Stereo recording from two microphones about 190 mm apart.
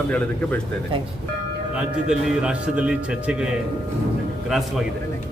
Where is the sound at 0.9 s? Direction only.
25° right (ahead or behind).